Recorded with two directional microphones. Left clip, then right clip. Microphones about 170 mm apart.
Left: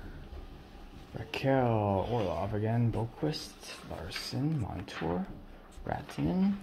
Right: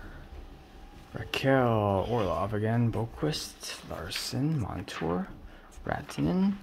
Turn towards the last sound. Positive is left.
turn(degrees=-30)  # may be behind; listen again after turning